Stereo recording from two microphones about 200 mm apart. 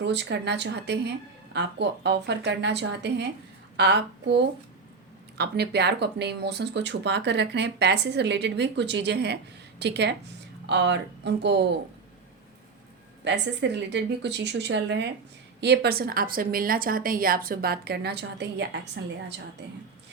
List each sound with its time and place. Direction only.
0.0 s speech: 60° right (ahead or behind)
13.2 s speech: 60° right (ahead or behind)